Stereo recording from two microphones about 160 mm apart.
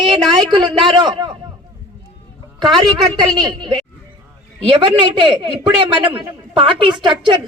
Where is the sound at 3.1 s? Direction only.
25° right (ahead or behind).